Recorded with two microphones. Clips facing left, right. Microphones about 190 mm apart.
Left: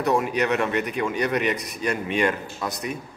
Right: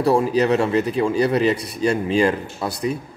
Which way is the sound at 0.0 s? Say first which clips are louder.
Right 5 dB; 30° right (ahead or behind).